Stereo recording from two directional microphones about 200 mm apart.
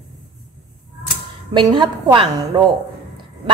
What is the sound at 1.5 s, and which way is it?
A woman's voice, 25° right (ahead or behind).